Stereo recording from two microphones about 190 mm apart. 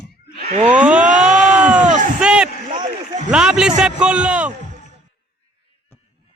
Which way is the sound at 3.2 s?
5° right (ahead or behind).